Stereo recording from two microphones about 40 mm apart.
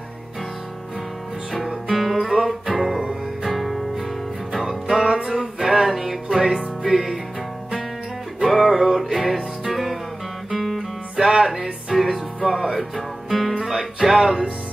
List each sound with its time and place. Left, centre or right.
1.7 s guitar: centre
2.8 s music: centre
8.4 s music: centre
10.5 s music: centre